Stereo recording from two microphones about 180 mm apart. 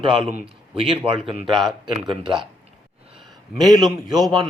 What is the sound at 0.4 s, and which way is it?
A man's voice, 30° right (ahead or behind).